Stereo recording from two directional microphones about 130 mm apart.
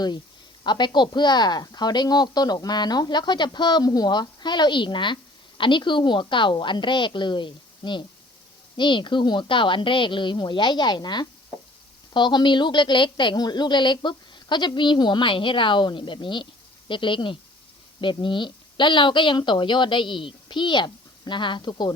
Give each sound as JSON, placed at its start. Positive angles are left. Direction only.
{"t": 0.6, "sound": "speech", "side_deg": 35}